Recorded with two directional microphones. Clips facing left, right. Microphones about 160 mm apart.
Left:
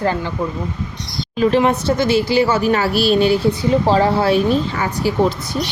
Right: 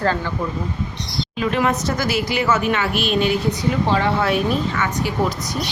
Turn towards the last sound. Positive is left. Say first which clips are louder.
# left 4 dB
turn(degrees=35)  # may be behind; listen again after turning